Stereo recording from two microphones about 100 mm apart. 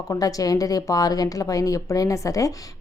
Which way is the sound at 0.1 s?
35° left (ahead or behind).